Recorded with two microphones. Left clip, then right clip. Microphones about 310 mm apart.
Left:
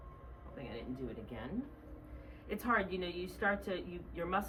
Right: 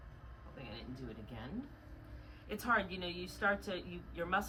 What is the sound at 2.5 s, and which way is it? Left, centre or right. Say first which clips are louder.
A woman's voice: even; centre.